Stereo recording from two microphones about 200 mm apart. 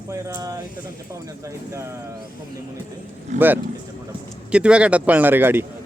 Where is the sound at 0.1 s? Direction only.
15° right (ahead or behind).